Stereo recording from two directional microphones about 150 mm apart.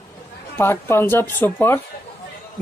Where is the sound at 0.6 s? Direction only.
15° left (ahead or behind).